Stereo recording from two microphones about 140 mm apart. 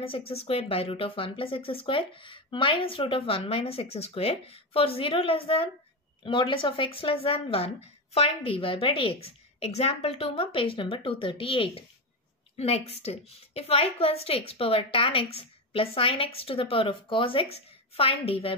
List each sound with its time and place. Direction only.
0.0 s a woman's voice: 40° left (ahead or behind)